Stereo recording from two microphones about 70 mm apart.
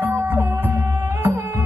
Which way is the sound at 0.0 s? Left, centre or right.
Right.